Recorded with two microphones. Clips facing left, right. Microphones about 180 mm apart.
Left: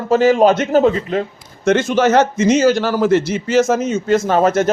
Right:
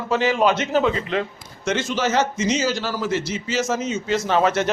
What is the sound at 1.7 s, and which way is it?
A man's voice, 55° left (ahead or behind).